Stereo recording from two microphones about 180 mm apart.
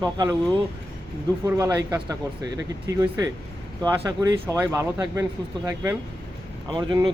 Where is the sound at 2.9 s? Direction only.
15° right (ahead or behind).